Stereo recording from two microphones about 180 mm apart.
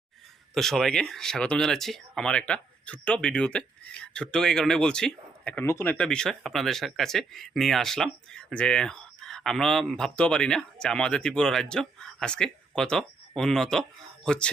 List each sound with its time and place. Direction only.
0.5 s speech: centre (ahead or behind)